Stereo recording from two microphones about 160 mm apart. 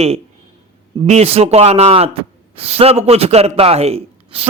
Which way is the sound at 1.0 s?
40° right (ahead or behind).